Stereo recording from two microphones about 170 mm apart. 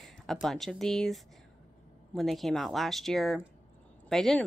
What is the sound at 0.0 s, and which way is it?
Speech, centre (ahead or behind).